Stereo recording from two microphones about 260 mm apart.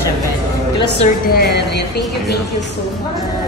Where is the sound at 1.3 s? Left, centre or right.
Left.